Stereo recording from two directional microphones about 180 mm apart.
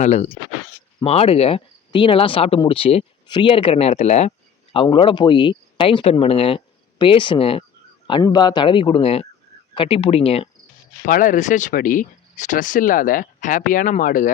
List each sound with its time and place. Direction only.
0.0 s speech: 35° left (ahead or behind)
11.0 s speech: 45° left (ahead or behind)